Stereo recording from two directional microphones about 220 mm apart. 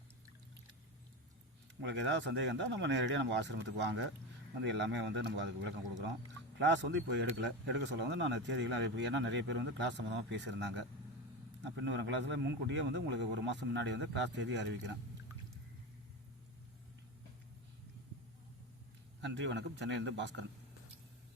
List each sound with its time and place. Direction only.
1.8 s speech: 55° right (ahead or behind)
11.6 s speech: 55° right (ahead or behind)
19.2 s speech: 55° right (ahead or behind)